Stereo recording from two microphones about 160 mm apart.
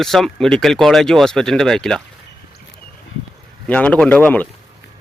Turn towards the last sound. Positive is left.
turn(degrees=10)  # may be behind; listen again after turning